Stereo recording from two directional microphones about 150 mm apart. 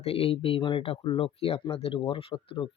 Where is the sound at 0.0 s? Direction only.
40° left (ahead or behind).